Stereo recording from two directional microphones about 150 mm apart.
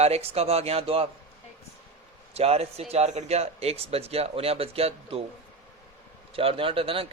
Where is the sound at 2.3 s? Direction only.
45° right (ahead or behind).